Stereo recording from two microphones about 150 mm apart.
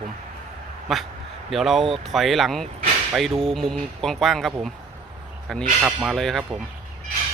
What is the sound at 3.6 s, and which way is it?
Speech, 5° left (ahead or behind).